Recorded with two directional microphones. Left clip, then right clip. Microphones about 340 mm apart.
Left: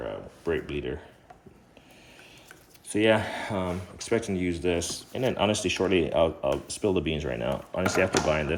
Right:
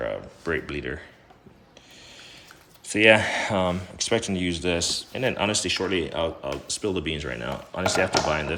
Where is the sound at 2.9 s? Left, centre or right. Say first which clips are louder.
Right 6 dB; centre.